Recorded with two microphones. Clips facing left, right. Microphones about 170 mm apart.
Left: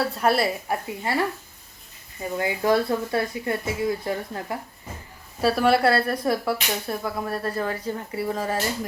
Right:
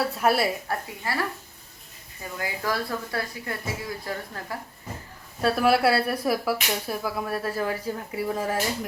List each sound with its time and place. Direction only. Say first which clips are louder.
0.0 s speech: left 1 dB; centre (ahead or behind)
0.7 s speech: left 4 dB; 25° left (ahead or behind)
2.4 s speech: left 7 dB; 25° left (ahead or behind)
5.4 s speech: left 1 dB; centre (ahead or behind)